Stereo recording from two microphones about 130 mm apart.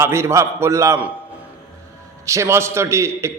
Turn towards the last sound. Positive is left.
turn(degrees=-20)  # may be behind; listen again after turning